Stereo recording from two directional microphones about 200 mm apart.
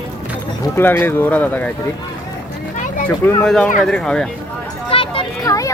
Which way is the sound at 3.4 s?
5° left (ahead or behind).